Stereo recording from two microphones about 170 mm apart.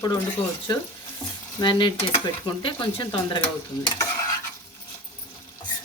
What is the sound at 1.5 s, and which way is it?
Stir, 25° left (ahead or behind).